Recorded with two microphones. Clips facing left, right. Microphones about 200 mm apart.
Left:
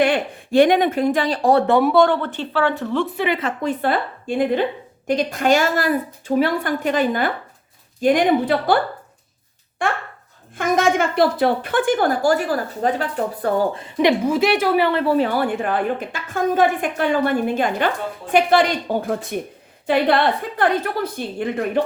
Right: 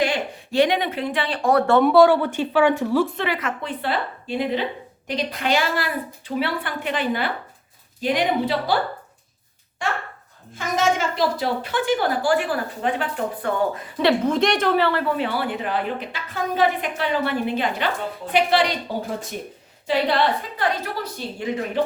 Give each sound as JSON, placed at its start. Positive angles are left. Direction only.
{"t": 0.0, "sound": "speech", "side_deg": 55}
{"t": 1.8, "sound": "speech", "side_deg": 0}
{"t": 3.2, "sound": "speech", "side_deg": 20}
{"t": 3.6, "sound": "a woman's voice", "side_deg": 45}
{"t": 9.8, "sound": "a child's voice", "side_deg": 55}
{"t": 13.8, "sound": "speech", "side_deg": 15}
{"t": 15.0, "sound": "a woman's voice", "side_deg": 40}
{"t": 20.6, "sound": "a woman's voice", "side_deg": 55}